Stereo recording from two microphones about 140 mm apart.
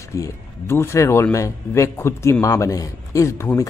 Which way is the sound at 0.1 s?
20° left (ahead or behind).